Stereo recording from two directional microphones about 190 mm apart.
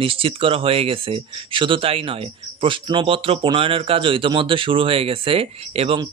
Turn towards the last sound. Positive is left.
turn(degrees=-30)  # may be behind; listen again after turning